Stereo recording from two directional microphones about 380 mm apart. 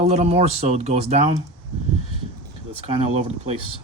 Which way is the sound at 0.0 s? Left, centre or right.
Centre.